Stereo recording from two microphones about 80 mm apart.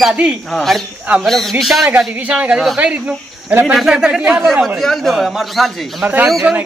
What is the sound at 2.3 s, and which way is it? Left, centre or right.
Speech, centre.